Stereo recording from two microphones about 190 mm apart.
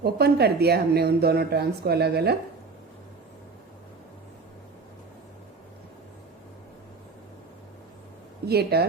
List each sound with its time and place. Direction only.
0.0 s speech: 55° right (ahead or behind)
8.4 s speech: 55° right (ahead or behind)